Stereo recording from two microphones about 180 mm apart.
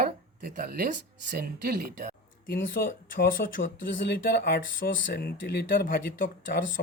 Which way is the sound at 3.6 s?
80° left.